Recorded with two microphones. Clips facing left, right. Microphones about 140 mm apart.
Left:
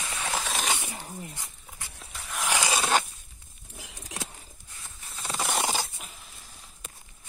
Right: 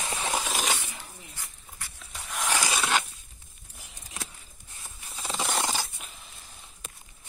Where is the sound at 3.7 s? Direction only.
90° left.